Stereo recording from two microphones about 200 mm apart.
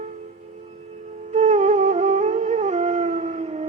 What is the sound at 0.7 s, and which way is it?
Music, 35° right (ahead or behind).